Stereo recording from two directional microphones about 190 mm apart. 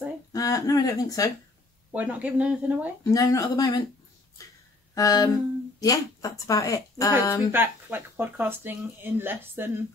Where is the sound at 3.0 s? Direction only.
15° left (ahead or behind).